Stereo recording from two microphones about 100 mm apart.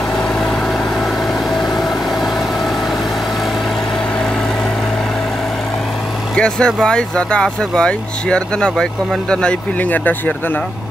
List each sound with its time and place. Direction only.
6.3 s speech: 10° left (ahead or behind)